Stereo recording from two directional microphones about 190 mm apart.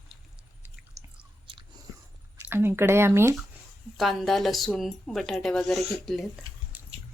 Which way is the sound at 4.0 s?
Centre (ahead or behind).